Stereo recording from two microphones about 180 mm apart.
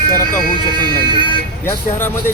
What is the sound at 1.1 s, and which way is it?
Speech, 25° right (ahead or behind).